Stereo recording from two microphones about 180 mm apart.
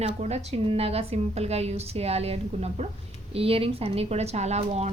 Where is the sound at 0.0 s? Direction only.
40° right (ahead or behind).